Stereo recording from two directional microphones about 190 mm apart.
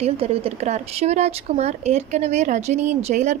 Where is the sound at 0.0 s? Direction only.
30° right (ahead or behind).